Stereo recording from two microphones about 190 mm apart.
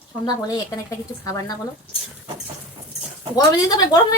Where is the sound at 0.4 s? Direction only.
20° left (ahead or behind).